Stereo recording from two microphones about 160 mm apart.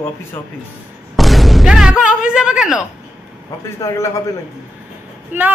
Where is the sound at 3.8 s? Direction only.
20° left (ahead or behind).